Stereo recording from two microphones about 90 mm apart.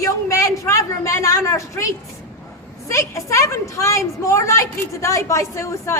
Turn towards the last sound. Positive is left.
turn(degrees=35)  # may be behind; listen again after turning